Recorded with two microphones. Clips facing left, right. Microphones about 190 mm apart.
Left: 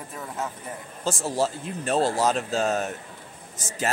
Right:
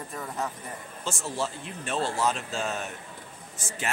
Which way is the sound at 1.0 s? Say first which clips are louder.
Left 7 dB; 35° left (ahead or behind).